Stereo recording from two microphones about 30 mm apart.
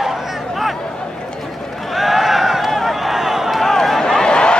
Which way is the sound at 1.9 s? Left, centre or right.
Centre.